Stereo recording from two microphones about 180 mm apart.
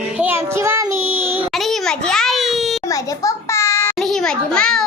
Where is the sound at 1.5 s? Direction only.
Centre (ahead or behind).